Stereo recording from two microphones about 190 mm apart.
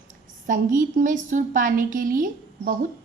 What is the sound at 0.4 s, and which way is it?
A woman's voice, 45° right (ahead or behind).